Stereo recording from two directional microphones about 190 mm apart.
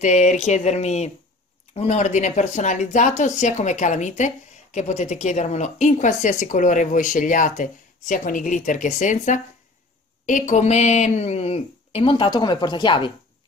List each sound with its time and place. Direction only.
0.0 s speech: 40° left (ahead or behind)